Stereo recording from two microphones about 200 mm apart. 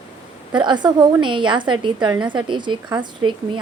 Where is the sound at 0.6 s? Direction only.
20° right (ahead or behind).